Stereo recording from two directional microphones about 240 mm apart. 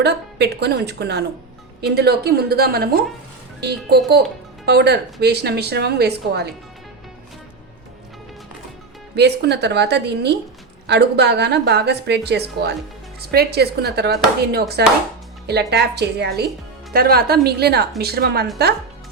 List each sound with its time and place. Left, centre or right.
0.0 s a woman's voice: right
9.1 s a woman's voice: right